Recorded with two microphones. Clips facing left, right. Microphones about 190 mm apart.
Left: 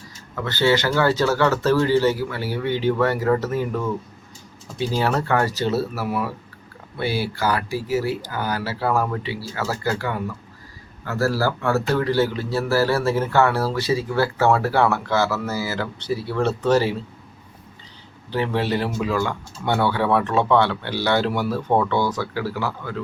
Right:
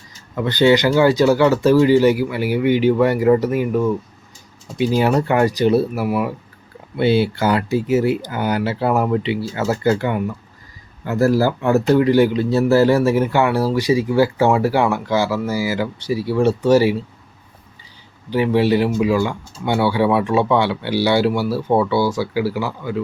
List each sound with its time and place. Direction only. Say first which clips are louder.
0.3 s speech: right 6 dB; 15° right (ahead or behind)
18.3 s speech: right 7 dB; 10° right (ahead or behind)